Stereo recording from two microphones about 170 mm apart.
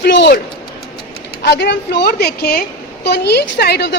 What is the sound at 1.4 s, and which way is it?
A woman's voice, 75° left (ahead or behind).